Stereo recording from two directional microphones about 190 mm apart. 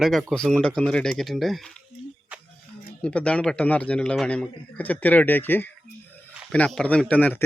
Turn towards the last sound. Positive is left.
turn(degrees=10)  # may be behind; listen again after turning